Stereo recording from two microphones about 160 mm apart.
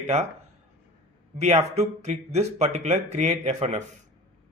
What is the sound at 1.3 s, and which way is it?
A man's voice, 45° right (ahead or behind).